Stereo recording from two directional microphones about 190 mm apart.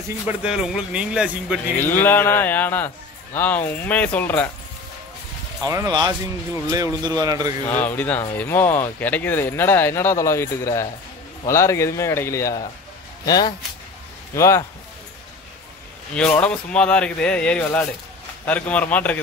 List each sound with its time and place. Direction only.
0.3 s speech: 5° right (ahead or behind)
1.9 s speech: 10° left (ahead or behind)
5.7 s speech: 20° right (ahead or behind)
7.6 s speech: 10° left (ahead or behind)
16.2 s speech: 5° left (ahead or behind)